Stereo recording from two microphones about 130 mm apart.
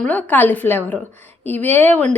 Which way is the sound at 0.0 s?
15° left (ahead or behind).